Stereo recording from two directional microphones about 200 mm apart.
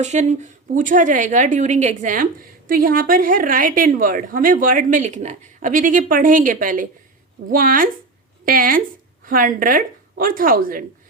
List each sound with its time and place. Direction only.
0.0 s a woman's voice: 35° right (ahead or behind)